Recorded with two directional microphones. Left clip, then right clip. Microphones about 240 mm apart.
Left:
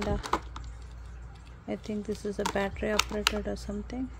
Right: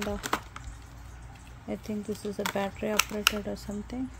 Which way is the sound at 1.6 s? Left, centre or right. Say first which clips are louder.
Left 1 dB; centre.